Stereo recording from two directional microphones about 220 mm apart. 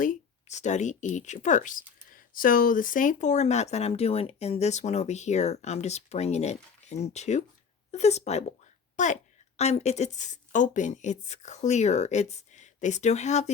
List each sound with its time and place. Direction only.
0.0 s a woman's voice: 35° left (ahead or behind)